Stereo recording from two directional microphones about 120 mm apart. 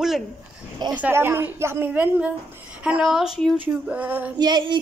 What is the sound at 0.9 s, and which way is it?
A woman's voice, 15° right (ahead or behind).